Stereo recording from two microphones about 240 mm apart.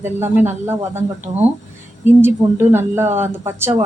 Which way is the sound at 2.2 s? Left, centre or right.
Centre.